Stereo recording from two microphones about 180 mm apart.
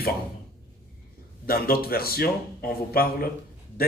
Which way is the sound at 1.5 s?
55° left (ahead or behind).